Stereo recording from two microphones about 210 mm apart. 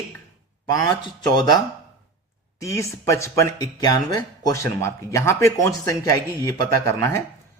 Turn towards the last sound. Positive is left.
turn(degrees=15)  # may be behind; listen again after turning